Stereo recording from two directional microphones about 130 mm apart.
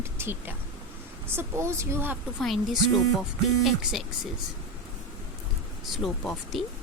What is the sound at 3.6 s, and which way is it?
Speech, 5° right (ahead or behind).